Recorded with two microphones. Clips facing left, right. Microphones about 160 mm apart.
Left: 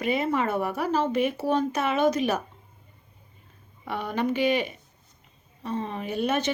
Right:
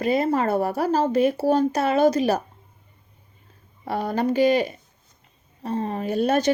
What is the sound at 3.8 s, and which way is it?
Speech, 35° right (ahead or behind).